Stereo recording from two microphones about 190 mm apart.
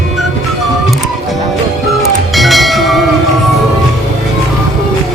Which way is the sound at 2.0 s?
Centre (ahead or behind).